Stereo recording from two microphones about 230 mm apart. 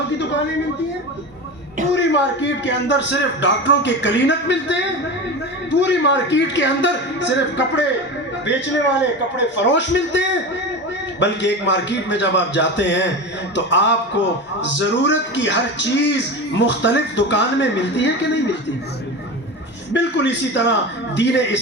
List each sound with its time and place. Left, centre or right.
2.0 s a man's voice: left
5.8 s a man's voice: left
19.9 s a man's voice: left